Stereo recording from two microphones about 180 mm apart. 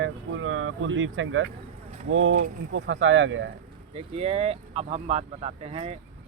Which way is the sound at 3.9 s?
35° right (ahead or behind).